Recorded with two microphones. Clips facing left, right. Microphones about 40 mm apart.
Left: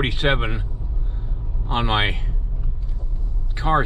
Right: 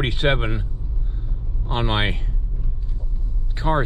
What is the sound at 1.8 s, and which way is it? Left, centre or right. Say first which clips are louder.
Speech: left 2 dB; centre.